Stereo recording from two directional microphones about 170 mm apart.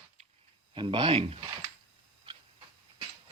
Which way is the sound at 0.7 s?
30° right (ahead or behind).